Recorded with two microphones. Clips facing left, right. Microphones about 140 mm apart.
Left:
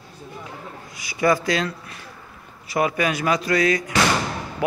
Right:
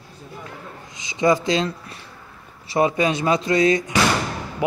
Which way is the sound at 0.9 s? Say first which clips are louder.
Right 1 dB; 20° right (ahead or behind).